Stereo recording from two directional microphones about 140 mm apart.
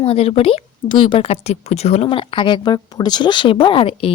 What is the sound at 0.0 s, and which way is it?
Speech, 45° left (ahead or behind).